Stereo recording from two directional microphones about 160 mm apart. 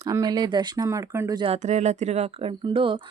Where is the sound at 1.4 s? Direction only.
35° right (ahead or behind).